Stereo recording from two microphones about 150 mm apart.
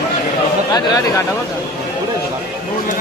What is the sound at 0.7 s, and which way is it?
Speech, 25° left (ahead or behind).